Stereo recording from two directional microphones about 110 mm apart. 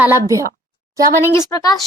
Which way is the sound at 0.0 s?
25° right (ahead or behind).